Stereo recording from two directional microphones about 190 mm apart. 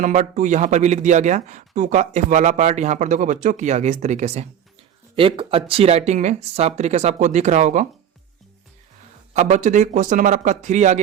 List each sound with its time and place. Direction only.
0.0 s speech: 40° right (ahead or behind)
9.3 s speech: 40° right (ahead or behind)